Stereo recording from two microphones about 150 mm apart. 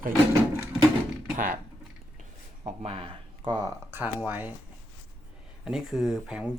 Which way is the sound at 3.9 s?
10° right (ahead or behind).